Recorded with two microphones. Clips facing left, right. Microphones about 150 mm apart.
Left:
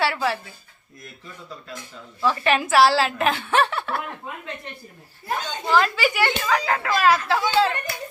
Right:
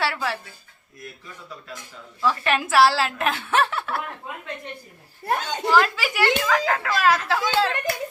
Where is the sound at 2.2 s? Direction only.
Centre (ahead or behind).